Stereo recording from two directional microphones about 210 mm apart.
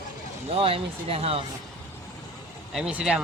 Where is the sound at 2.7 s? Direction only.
5° right (ahead or behind).